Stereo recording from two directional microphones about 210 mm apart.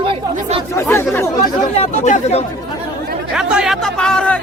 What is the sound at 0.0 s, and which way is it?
Chatter, 25° right (ahead or behind).